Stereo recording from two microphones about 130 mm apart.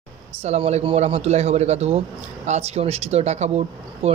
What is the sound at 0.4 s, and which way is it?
A man's voice, 55° right (ahead or behind).